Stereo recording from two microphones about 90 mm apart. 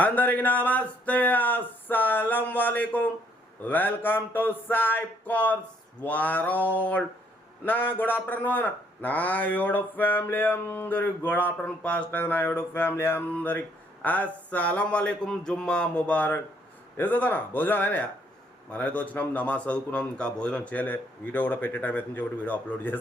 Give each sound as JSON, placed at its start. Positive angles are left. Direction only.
{"t": 0.0, "sound": "a man's voice", "side_deg": 20}